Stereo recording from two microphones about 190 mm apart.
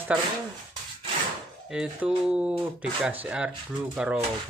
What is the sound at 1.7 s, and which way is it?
Speech, 5° right (ahead or behind).